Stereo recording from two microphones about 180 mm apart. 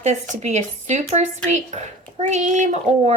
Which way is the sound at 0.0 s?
40° right (ahead or behind).